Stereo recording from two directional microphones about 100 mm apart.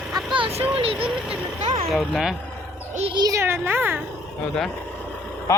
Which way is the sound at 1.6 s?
90° right.